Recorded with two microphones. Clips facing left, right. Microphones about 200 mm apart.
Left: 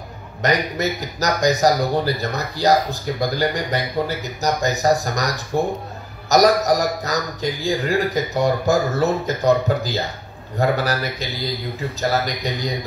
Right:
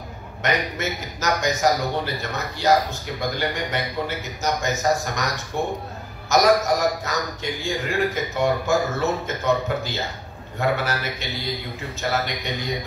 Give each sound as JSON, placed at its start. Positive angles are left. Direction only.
{"t": 0.4, "sound": "a man's voice", "side_deg": 35}